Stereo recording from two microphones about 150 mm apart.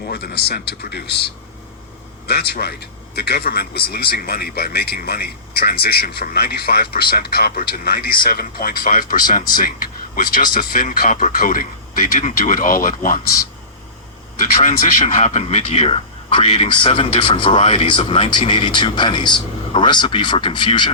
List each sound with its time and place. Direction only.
0.0 s speech: 90° left
2.2 s speech: 90° left; by 13.1 s 65° left (ahead or behind)
14.6 s speech: 55° left (ahead or behind); by 20.9 s 30° left (ahead or behind)